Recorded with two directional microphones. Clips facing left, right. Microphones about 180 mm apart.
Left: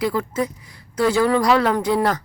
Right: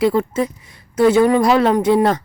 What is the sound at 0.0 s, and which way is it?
Speech, 25° right (ahead or behind).